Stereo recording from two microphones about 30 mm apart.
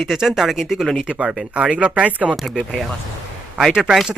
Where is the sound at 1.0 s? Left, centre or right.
Right.